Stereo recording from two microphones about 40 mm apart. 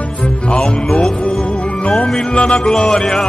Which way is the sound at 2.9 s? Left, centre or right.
Centre.